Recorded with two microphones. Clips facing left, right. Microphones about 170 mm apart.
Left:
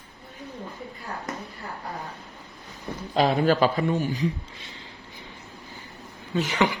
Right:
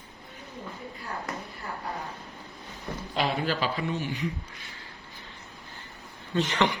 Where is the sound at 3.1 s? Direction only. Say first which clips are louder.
Left 8 dB; 45° left (ahead or behind).